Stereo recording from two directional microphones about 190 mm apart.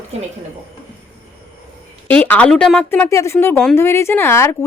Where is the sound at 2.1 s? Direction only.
5° left (ahead or behind).